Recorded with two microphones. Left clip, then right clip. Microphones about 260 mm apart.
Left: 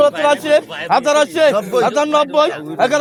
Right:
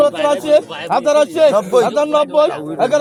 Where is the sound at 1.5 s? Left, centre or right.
Centre.